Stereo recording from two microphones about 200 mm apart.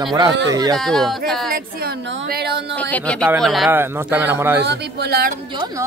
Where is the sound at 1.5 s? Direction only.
50° right (ahead or behind).